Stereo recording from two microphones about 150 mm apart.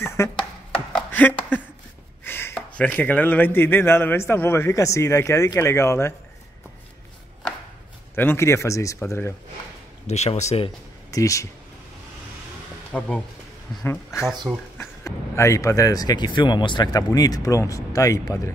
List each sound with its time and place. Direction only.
0.0 s chopping: 20° left (ahead or behind)
0.7 s a sound: 10° left (ahead or behind)
2.2 s speech: 15° left (ahead or behind)
8.2 s speech: 15° left (ahead or behind)
10.0 s speech: 45° left (ahead or behind)
11.1 s speech: 20° left (ahead or behind)
12.9 s speech: 5° left (ahead or behind)
14.5 s speech: centre (ahead or behind)
14.8 s speech: 20° left (ahead or behind)